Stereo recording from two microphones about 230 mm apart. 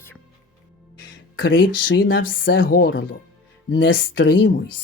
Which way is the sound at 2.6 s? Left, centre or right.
Left.